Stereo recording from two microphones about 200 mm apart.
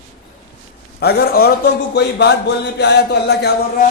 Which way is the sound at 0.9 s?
55° left (ahead or behind).